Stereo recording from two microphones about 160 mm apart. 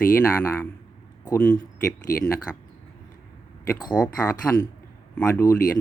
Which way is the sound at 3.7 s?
25° left (ahead or behind).